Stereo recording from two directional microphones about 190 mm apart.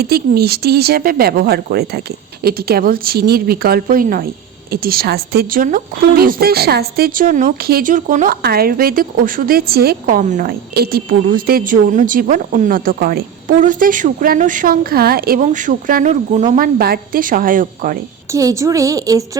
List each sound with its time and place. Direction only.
0.0 s a woman's voice: 55° right (ahead or behind)
8.4 s a woman's voice: 55° right (ahead or behind)
18.3 s a woman's voice: 15° right (ahead or behind)